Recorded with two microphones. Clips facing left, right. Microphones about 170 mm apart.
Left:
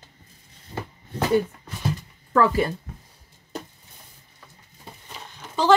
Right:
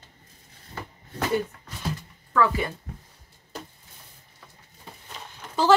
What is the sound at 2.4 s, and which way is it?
Speech, 35° left (ahead or behind).